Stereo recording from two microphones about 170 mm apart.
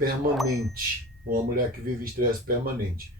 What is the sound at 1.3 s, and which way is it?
Speech, 60° right (ahead or behind).